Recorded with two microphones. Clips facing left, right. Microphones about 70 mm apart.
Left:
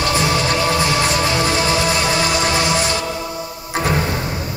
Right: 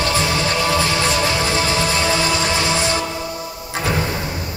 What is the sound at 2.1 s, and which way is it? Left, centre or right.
Music, right.